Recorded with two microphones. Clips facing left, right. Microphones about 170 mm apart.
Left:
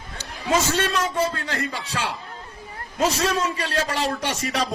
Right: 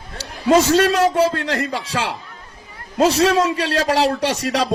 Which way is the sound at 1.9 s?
35° right (ahead or behind).